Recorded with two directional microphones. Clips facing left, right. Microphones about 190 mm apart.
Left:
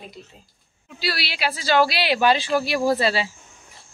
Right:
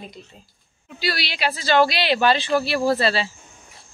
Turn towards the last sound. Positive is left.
turn(degrees=10)  # may be behind; listen again after turning